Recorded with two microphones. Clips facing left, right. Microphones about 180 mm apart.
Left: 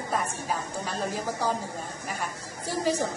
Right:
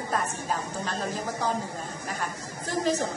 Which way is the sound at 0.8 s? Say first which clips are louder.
Even; 15° left (ahead or behind).